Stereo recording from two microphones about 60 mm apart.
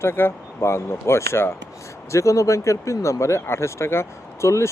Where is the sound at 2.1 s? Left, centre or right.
Left.